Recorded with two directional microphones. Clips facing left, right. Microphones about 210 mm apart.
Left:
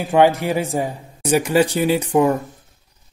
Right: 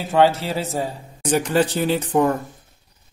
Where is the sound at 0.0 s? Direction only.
15° left (ahead or behind).